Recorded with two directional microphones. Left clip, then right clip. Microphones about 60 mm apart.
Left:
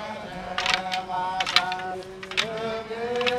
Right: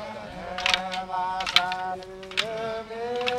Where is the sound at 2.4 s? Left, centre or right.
Left.